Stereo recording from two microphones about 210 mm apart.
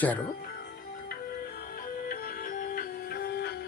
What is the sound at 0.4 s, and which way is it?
Music, 45° left (ahead or behind).